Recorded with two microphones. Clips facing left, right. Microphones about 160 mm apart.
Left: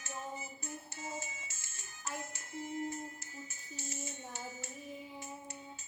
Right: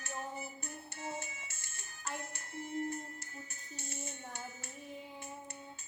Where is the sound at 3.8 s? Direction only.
60° right (ahead or behind).